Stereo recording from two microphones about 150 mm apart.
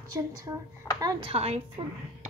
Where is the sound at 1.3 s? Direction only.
40° right (ahead or behind).